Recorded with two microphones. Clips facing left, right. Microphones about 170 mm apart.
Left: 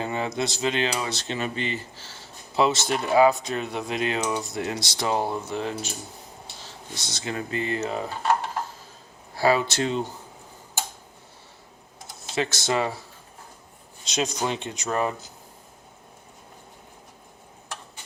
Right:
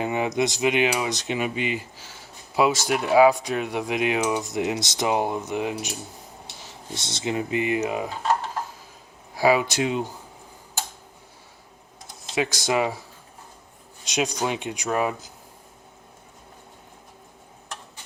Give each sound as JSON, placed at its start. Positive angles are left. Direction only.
{"t": 0.0, "sound": "speech", "side_deg": -15}
{"t": 6.7, "sound": "speech", "side_deg": -25}
{"t": 9.3, "sound": "speech", "side_deg": -10}
{"t": 12.3, "sound": "speech", "side_deg": -15}
{"t": 14.0, "sound": "speech", "side_deg": -15}